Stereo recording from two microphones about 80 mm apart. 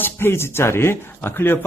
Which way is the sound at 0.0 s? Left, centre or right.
Left.